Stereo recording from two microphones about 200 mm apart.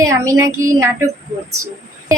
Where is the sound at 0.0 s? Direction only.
15° right (ahead or behind).